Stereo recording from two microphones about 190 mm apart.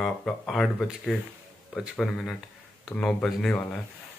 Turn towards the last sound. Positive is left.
turn(degrees=5)  # may be behind; listen again after turning